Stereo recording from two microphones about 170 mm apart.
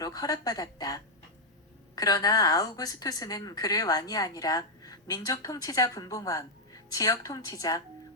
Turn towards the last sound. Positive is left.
turn(degrees=20)  # may be behind; listen again after turning